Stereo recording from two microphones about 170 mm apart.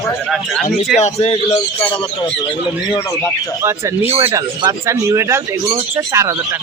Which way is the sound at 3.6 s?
15° right (ahead or behind).